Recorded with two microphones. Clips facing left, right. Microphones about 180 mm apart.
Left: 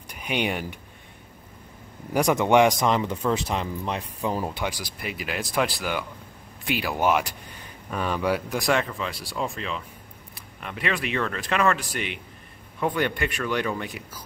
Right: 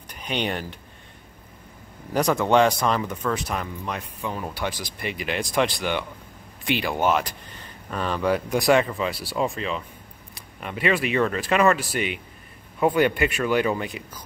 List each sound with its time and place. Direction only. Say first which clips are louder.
0.1 s speech: even; 10° left (ahead or behind)
2.1 s speech: even; 15° left (ahead or behind); by 4.5 s 35° left (ahead or behind)
4.6 s speech: right 1 dB; 10° left (ahead or behind)